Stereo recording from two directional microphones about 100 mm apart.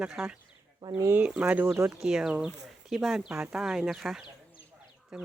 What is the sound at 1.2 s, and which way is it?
Speech, 10° right (ahead or behind).